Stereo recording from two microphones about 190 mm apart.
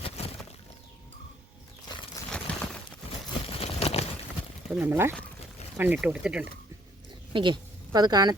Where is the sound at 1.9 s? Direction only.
25° left (ahead or behind).